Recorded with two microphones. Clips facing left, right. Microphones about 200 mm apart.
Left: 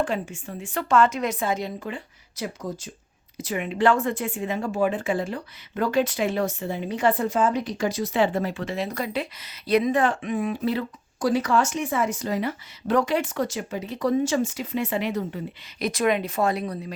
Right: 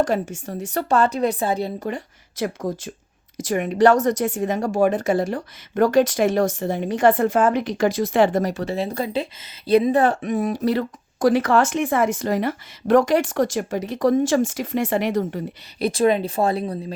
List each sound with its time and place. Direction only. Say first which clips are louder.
0.0 s a woman's voice: right 5 dB; 40° right (ahead or behind)
2.4 s speech: right 6 dB; 50° right (ahead or behind)
7.7 s speech: right 6 dB; 90° right
8.1 s a woman's voice: right 5 dB; 45° right (ahead or behind)
11.3 s speech: right 5 dB; 55° right (ahead or behind)
15.8 s a woman's voice: right 5 dB; 30° right (ahead or behind)